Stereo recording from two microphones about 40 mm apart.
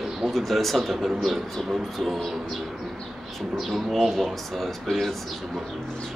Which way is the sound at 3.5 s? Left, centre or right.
Centre.